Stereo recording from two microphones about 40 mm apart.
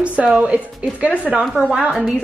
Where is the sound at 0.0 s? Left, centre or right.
Right.